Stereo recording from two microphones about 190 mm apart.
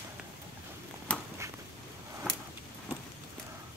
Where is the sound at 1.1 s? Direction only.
5° left (ahead or behind).